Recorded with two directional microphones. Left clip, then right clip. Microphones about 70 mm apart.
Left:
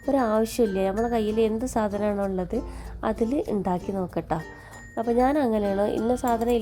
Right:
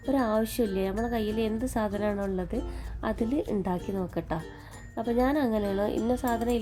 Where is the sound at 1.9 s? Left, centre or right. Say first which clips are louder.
Left 4 dB; left.